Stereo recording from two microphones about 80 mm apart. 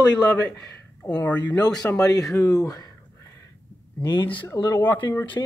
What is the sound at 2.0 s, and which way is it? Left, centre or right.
Speech, left.